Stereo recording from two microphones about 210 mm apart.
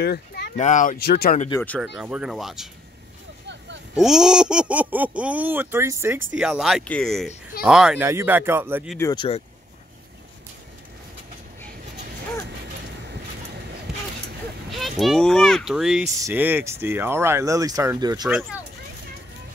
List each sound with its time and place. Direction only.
0.0 s speech: 50° left (ahead or behind)
0.6 s speech: 35° left (ahead or behind)
2.0 s speech: 5° right (ahead or behind)
3.9 s speech: centre (ahead or behind)
8.9 s speech: 20° left (ahead or behind)
14.7 s speech: centre (ahead or behind); by 18.3 s 20° right (ahead or behind)